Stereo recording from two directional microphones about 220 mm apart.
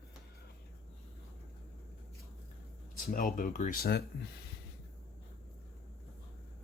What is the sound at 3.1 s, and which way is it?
Speech, 40° left (ahead or behind).